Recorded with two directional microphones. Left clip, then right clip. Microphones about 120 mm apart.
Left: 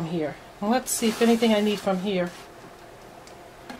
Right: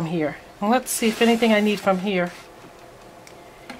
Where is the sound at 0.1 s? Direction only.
20° right (ahead or behind).